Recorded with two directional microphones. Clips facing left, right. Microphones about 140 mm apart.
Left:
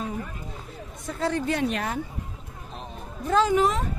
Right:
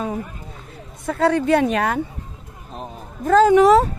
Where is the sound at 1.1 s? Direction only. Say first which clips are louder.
Right 9 dB; 70° right (ahead or behind).